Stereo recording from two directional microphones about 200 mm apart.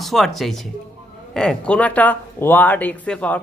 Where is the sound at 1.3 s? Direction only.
5° left (ahead or behind).